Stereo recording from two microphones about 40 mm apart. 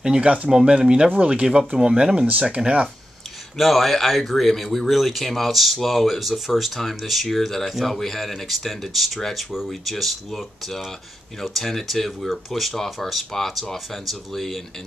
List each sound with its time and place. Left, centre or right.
0.2 s speech: right
3.5 s speech: centre
12.7 s speech: centre